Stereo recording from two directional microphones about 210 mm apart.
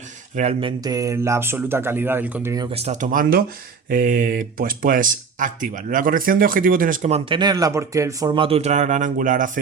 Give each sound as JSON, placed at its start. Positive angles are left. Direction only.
{"t": 0.3, "sound": "speech", "side_deg": -30}
{"t": 0.9, "sound": "speech", "side_deg": -15}
{"t": 7.3, "sound": "speech", "side_deg": -20}